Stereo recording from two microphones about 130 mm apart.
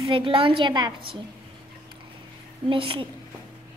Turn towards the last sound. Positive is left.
turn(degrees=-40)  # may be behind; listen again after turning